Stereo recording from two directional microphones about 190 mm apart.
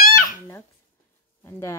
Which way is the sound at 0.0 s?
50° left (ahead or behind).